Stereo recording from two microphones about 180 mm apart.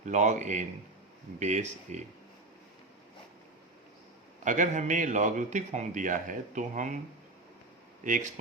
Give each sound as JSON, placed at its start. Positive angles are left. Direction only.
{"t": 0.0, "sound": "speech", "side_deg": -40}
{"t": 4.4, "sound": "a man's voice", "side_deg": -45}
{"t": 8.0, "sound": "a man's voice", "side_deg": -45}